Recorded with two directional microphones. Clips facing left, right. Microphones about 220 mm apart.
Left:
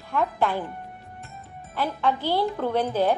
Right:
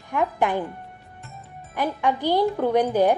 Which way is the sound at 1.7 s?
15° right (ahead or behind).